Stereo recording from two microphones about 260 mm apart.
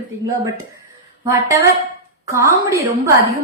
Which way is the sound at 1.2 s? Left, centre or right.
Centre.